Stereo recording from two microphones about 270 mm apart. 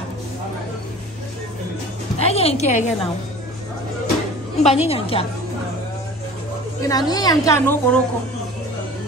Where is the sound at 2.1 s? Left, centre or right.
Left.